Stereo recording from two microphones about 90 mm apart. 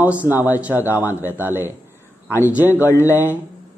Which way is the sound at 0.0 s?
20° right (ahead or behind).